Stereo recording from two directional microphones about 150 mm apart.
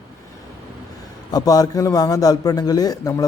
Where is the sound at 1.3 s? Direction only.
25° left (ahead or behind).